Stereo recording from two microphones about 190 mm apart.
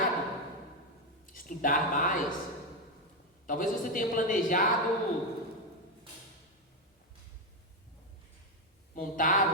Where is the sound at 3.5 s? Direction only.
45° left (ahead or behind).